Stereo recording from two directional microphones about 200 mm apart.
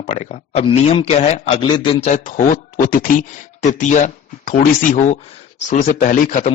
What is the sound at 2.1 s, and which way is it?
A man's voice, 40° left (ahead or behind).